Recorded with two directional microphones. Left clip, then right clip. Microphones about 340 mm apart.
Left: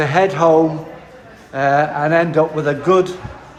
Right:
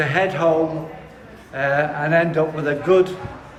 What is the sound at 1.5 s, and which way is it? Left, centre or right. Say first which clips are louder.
Speech: left 5 dB; centre.